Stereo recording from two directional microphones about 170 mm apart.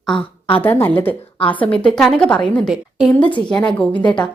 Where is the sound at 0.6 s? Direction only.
10° left (ahead or behind).